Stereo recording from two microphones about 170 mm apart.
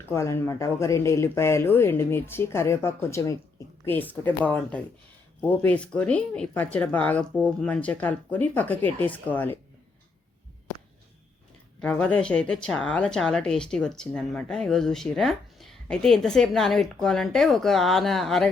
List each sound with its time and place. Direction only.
0.0 s speech: 15° left (ahead or behind)
11.8 s speech: 5° left (ahead or behind)